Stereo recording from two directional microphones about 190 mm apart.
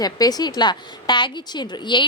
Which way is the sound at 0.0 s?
20° left (ahead or behind).